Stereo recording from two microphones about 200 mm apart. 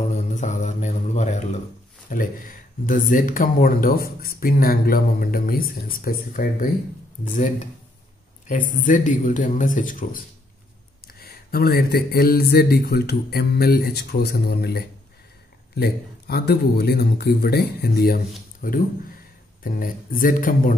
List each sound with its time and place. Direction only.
0.1 s mantra: 35° left (ahead or behind)
2.0 s a man's voice: 45° left (ahead or behind)